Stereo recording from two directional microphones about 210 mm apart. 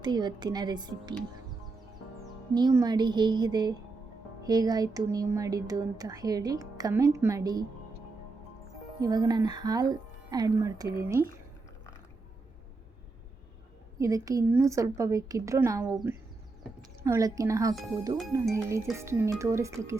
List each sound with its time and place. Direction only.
0.0 s speech: 20° right (ahead or behind)
2.6 s speech: 20° right (ahead or behind)
9.0 s speech: 20° right (ahead or behind)
14.0 s speech: 15° right (ahead or behind)
17.0 s speech: 15° right (ahead or behind)